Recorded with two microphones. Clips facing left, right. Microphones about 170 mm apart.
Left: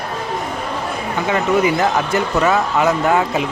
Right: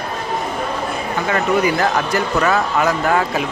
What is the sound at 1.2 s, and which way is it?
Speech, 20° left (ahead or behind).